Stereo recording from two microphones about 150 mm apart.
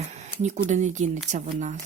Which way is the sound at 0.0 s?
50° right (ahead or behind).